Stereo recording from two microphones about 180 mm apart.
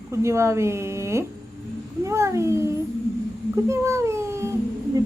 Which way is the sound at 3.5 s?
15° right (ahead or behind).